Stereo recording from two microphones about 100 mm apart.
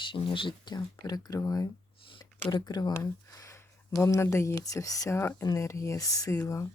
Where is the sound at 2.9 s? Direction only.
30° left (ahead or behind).